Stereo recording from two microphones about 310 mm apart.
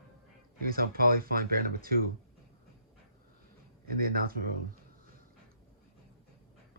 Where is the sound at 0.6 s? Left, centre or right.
Right.